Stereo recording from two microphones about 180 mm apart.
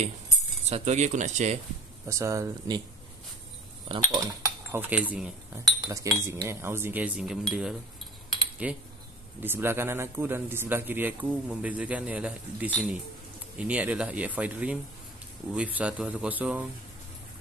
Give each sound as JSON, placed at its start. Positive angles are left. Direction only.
{"t": 0.7, "sound": "speech", "side_deg": -40}
{"t": 2.0, "sound": "a man's voice", "side_deg": -15}
{"t": 3.9, "sound": "speech", "side_deg": -20}
{"t": 4.7, "sound": "a man's voice", "side_deg": -10}